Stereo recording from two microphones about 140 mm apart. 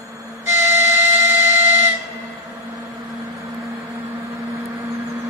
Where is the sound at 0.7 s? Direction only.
15° right (ahead or behind).